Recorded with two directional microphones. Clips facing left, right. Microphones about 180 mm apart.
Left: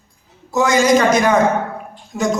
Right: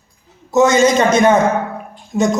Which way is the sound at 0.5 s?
25° right (ahead or behind).